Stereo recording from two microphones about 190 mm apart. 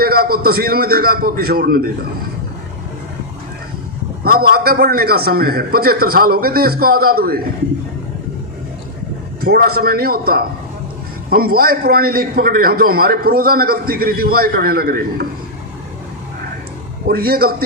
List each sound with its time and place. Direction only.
0.0 s a man's voice: 50° right (ahead or behind)
4.2 s a man's voice: 55° right (ahead or behind)
9.4 s a man's voice: 55° right (ahead or behind)
17.1 s a man's voice: 55° right (ahead or behind)